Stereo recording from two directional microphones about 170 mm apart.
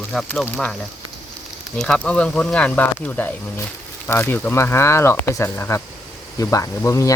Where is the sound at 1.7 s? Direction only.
5° left (ahead or behind).